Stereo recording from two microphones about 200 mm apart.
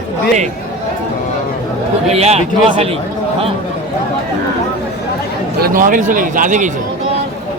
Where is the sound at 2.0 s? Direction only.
30° right (ahead or behind).